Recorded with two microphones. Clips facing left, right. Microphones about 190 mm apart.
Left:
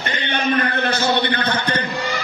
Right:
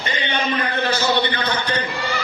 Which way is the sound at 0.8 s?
55° left (ahead or behind).